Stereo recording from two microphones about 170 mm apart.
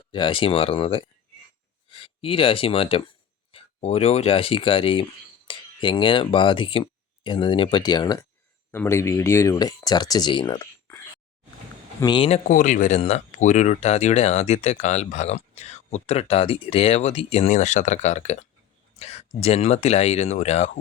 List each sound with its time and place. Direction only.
0.1 s speech: 30° left (ahead or behind)
12.5 s speech: 45° left (ahead or behind)